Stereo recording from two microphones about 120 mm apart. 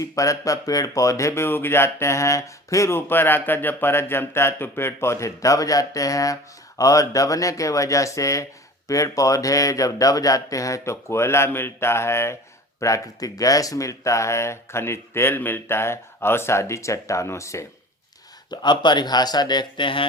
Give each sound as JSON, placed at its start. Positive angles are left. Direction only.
{"t": 0.0, "sound": "speech", "side_deg": 30}
{"t": 18.5, "sound": "speech", "side_deg": 40}